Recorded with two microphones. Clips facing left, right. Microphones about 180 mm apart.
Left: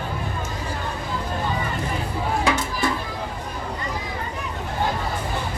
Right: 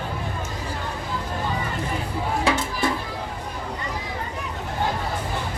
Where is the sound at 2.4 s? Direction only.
30° right (ahead or behind).